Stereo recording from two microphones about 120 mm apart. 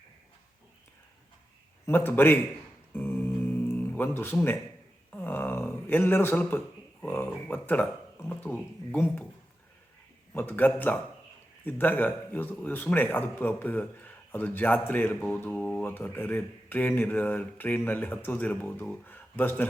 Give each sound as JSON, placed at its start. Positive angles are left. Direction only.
{"t": 1.9, "sound": "speech", "side_deg": 20}
{"t": 2.9, "sound": "music", "side_deg": 15}
{"t": 5.1, "sound": "a sound", "side_deg": 15}
{"t": 7.0, "sound": "speech", "side_deg": 15}
{"t": 10.3, "sound": "speech", "side_deg": 15}